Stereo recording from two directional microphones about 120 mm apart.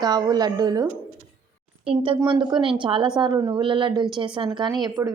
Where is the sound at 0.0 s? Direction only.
35° right (ahead or behind).